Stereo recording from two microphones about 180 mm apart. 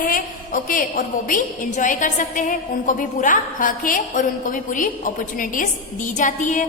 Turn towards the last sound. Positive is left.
turn(degrees=45)  # may be behind; listen again after turning